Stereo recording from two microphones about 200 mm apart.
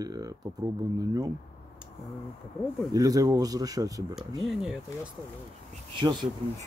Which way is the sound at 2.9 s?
15° right (ahead or behind).